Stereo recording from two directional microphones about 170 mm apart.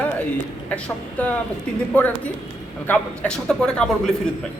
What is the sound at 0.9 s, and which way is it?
A man's voice, 10° left (ahead or behind).